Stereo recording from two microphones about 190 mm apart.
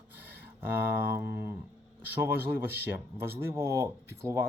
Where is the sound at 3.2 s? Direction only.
15° right (ahead or behind).